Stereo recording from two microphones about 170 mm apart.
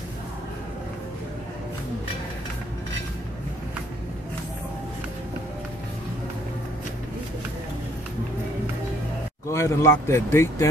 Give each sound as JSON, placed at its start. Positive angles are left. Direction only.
{"t": 9.5, "sound": "speech", "side_deg": 15}